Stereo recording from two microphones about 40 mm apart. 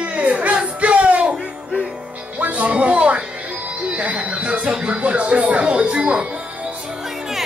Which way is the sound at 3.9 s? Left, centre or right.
Right.